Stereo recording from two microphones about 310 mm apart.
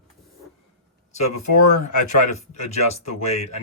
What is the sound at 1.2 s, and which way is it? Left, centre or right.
Speech, left.